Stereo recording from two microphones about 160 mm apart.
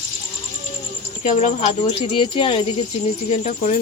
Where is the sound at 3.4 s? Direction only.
50° left (ahead or behind).